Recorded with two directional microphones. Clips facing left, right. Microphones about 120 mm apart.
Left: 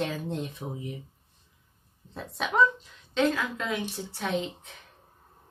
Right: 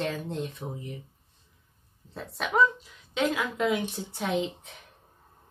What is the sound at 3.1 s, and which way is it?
Speech, 10° right (ahead or behind).